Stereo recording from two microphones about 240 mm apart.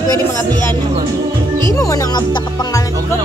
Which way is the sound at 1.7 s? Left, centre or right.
Centre.